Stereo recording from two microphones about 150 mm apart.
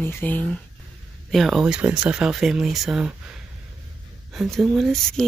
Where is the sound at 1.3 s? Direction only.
Centre (ahead or behind).